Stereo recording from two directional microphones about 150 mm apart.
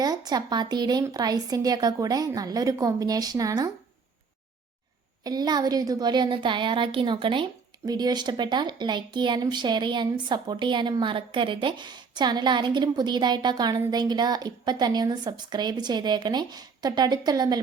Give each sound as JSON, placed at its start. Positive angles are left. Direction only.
{"t": 0.0, "sound": "speech", "side_deg": -25}
{"t": 5.2, "sound": "a woman's voice", "side_deg": -25}